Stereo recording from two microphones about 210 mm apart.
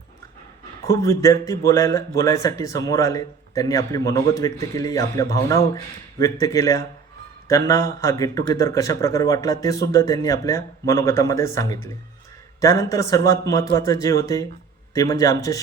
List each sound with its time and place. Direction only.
0.9 s a man's voice: 15° left (ahead or behind)